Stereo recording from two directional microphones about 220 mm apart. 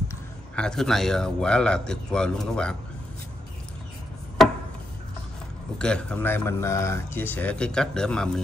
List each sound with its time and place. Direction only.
0.6 s speech: centre (ahead or behind)
5.8 s speech: 5° left (ahead or behind)